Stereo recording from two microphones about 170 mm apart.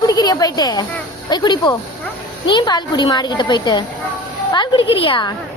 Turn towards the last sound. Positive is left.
turn(degrees=30)  # may be behind; listen again after turning